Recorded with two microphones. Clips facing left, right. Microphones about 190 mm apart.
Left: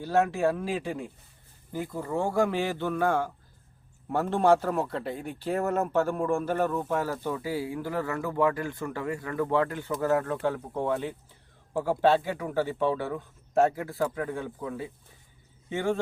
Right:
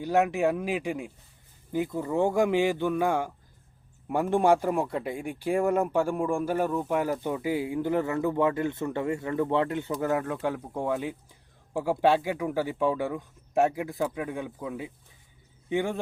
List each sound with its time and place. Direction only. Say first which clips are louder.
0.0 s speech: right 1 dB; 15° right (ahead or behind)